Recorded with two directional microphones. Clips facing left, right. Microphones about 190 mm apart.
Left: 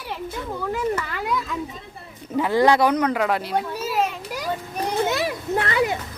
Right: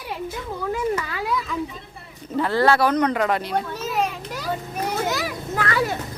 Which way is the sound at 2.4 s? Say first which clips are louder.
Left 1 dB; 15° left (ahead or behind).